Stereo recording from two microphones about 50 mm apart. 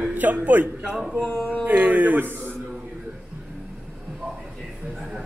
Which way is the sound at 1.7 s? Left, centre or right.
Right.